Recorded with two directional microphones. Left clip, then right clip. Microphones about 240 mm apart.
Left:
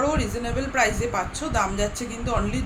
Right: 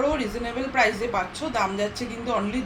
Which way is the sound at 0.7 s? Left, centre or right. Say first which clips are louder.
Right 1 dB; centre.